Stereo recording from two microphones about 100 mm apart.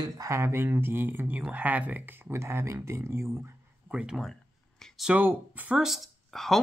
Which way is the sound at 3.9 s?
5° right (ahead or behind).